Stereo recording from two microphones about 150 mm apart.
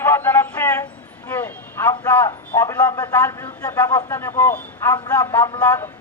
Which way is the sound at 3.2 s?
15° left (ahead or behind).